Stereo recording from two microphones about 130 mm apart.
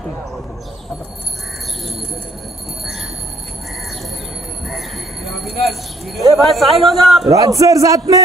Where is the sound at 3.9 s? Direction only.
Centre (ahead or behind).